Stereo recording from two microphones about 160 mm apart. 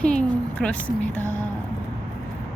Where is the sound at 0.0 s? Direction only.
5° left (ahead or behind).